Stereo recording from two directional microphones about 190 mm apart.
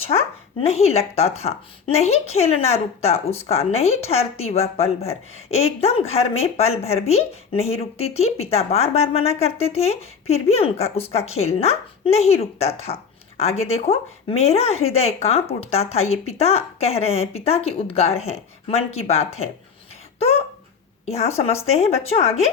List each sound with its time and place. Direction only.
0.0 s speech: 30° left (ahead or behind)